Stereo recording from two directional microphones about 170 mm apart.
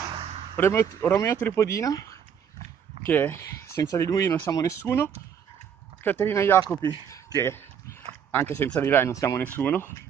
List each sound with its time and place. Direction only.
0.6 s a man's voice: 15° left (ahead or behind)